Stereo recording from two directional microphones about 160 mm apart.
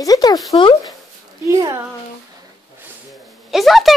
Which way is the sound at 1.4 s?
20° right (ahead or behind).